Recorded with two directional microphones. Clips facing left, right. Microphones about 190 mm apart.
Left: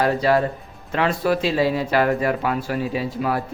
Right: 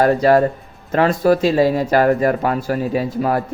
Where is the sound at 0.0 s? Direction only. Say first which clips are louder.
Right 5 dB; 45° right (ahead or behind).